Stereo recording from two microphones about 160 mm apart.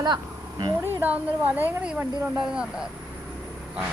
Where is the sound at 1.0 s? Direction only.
10° right (ahead or behind).